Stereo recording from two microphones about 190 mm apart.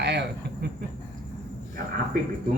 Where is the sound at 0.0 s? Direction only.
60° right (ahead or behind).